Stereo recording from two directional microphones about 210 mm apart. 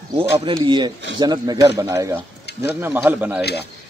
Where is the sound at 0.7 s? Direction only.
20° right (ahead or behind).